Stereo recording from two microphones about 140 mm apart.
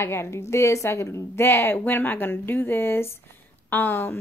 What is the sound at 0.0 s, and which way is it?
A woman's voice, 20° left (ahead or behind).